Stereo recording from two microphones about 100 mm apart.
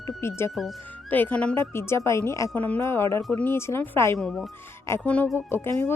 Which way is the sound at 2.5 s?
15° left (ahead or behind).